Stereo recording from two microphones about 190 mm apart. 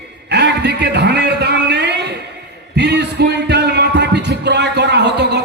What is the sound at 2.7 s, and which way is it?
Music, 60° right (ahead or behind).